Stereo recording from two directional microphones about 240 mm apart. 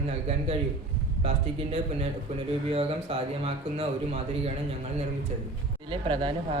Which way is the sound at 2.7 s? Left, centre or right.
Right.